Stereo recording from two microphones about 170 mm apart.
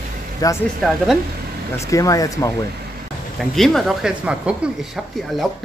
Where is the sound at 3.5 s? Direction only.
Centre (ahead or behind).